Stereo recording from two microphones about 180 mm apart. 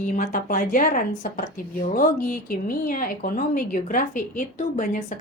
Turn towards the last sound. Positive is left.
turn(degrees=45)  # may be behind; listen again after turning